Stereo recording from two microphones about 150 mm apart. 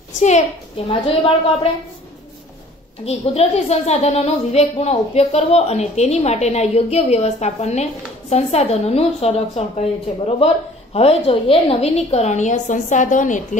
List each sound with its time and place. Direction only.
0.2 s a woman's voice: 45° left (ahead or behind)
3.1 s a woman's voice: 45° left (ahead or behind)